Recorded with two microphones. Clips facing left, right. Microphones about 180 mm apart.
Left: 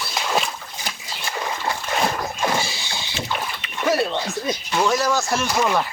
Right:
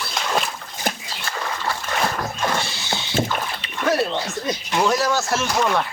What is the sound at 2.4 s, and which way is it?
Wild animals, 5° left (ahead or behind).